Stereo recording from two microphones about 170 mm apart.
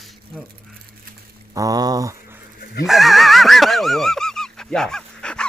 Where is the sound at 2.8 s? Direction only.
Centre (ahead or behind).